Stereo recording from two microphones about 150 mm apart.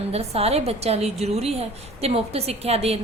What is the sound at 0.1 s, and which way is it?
A woman's voice, 45° right (ahead or behind).